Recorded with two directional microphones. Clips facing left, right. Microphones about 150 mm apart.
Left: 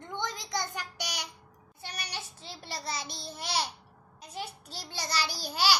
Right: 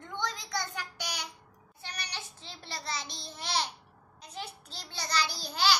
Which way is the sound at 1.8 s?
10° left (ahead or behind).